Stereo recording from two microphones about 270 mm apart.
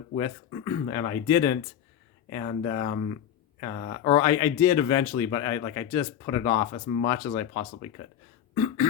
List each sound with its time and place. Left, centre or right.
0.2 s speech: centre